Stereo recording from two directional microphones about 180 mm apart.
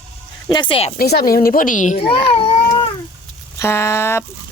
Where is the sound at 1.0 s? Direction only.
60° left (ahead or behind); by 2.9 s 30° left (ahead or behind).